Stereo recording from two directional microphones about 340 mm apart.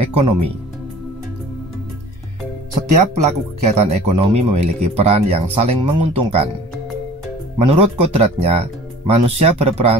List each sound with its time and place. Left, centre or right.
0.0 s music: centre
2.9 s speech: centre
7.7 s speech: centre